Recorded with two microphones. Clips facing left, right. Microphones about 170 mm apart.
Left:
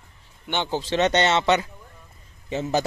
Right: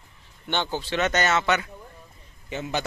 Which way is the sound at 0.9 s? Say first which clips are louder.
Left 3 dB; 30° left (ahead or behind).